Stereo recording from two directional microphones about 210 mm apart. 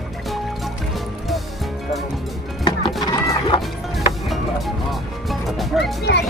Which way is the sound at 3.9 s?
Centre (ahead or behind).